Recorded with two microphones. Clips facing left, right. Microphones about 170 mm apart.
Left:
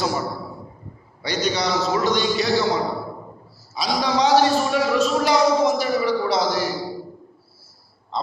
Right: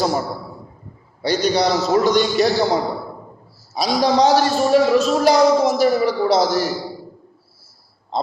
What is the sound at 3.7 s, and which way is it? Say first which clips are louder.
A man's voice: right 5 dB; 45° right (ahead or behind).